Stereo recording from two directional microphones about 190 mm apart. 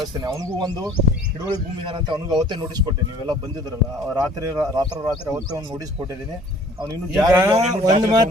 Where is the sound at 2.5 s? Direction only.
20° right (ahead or behind).